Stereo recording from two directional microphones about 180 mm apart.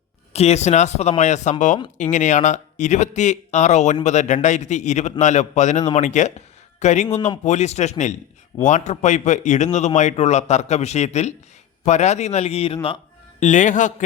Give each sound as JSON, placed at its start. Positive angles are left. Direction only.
{"t": 0.3, "sound": "speech", "side_deg": 35}
{"t": 13.4, "sound": "a man's voice", "side_deg": 45}